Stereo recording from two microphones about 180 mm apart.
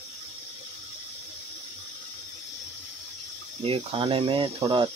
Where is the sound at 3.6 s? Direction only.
30° right (ahead or behind).